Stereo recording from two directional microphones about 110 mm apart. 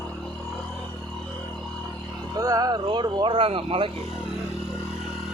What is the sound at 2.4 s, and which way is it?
Speech, 35° right (ahead or behind).